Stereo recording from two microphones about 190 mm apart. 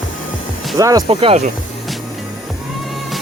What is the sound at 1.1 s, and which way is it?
Speech, 30° right (ahead or behind).